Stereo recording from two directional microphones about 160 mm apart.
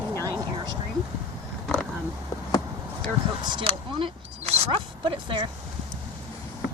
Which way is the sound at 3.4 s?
30° right (ahead or behind).